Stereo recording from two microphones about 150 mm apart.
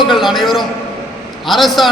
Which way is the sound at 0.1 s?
Centre (ahead or behind).